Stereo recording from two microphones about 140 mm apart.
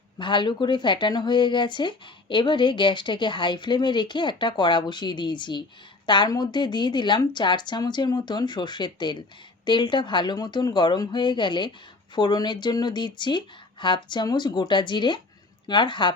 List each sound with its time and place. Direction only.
0.2 s speech: 35° left (ahead or behind)